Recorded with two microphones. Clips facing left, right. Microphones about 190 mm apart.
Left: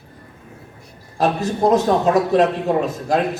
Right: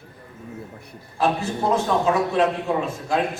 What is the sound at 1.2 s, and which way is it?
A man's voice, 40° left (ahead or behind).